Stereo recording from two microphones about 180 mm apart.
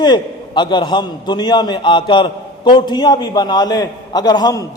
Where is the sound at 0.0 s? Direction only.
25° left (ahead or behind).